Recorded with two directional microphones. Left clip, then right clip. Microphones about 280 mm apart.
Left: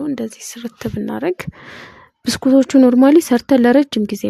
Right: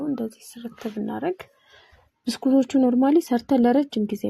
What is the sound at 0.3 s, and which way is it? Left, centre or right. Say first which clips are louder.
Speech: left 9 dB; left.